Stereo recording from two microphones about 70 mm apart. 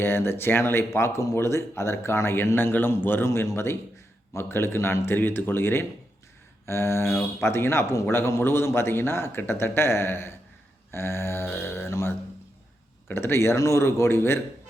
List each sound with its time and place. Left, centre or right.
0.0 s speech: left
3.2 s speech: left